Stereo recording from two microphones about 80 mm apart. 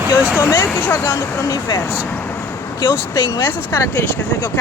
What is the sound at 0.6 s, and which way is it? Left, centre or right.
Speech, left.